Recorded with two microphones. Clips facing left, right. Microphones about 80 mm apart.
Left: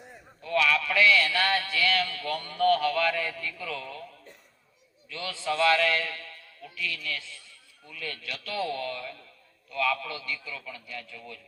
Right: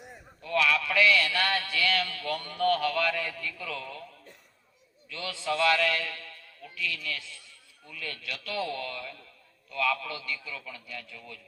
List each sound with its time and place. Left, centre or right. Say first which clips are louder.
0.4 s a sound: left 1 dB; left
2.8 s a man's voice: left 2 dB; left
5.0 s a man's voice: left 1 dB; left